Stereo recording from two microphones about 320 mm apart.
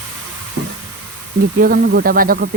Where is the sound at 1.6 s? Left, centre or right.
Right.